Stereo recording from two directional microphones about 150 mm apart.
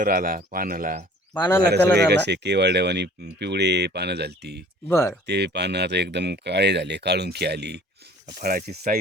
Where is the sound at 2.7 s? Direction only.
90° right.